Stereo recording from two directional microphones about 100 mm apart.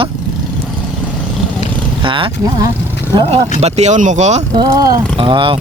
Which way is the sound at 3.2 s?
90° right.